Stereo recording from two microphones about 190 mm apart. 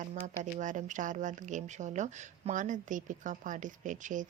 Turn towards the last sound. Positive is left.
turn(degrees=-40)  # may be behind; listen again after turning